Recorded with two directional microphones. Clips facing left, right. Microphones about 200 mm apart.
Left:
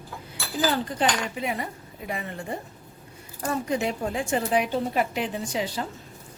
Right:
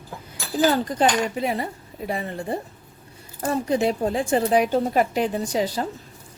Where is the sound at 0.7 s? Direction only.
40° right (ahead or behind).